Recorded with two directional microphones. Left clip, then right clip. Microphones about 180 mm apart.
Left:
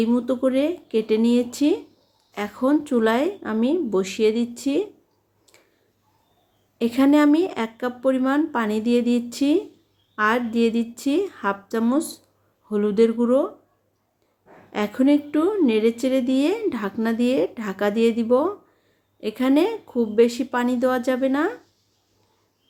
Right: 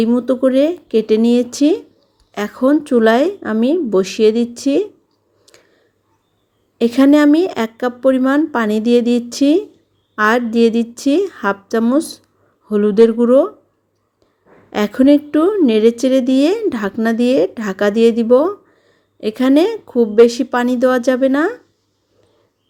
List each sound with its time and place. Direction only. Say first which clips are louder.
0.0 s a woman's voice: right 7 dB; 30° right (ahead or behind)
5.5 s a sound: right 8 dB; 35° right (ahead or behind)
6.7 s a woman's voice: right 7 dB; 35° right (ahead or behind)
14.7 s a woman's voice: right 8 dB; 40° right (ahead or behind)